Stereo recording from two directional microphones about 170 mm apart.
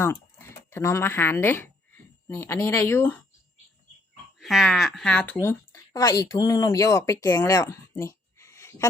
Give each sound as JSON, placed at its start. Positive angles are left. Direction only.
{"t": 0.0, "sound": "speech", "side_deg": 15}
{"t": 4.4, "sound": "speech", "side_deg": 0}